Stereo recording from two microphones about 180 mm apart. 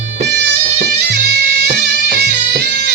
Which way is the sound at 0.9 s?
60° right (ahead or behind).